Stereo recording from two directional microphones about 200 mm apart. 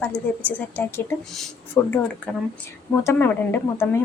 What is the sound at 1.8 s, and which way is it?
Speech, 15° left (ahead or behind).